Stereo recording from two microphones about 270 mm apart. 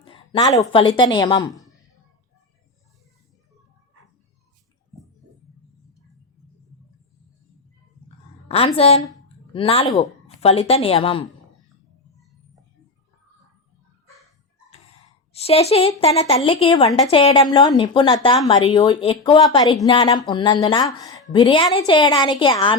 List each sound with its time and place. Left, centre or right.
0.0 s a sound: centre
0.7 s speech: centre
8.4 s a woman's voice: left
14.7 s a woman's voice: left